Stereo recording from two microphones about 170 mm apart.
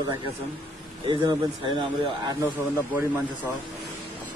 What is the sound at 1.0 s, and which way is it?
A man's voice, 30° right (ahead or behind).